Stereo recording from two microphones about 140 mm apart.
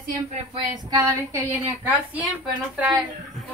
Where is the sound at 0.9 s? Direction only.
25° right (ahead or behind).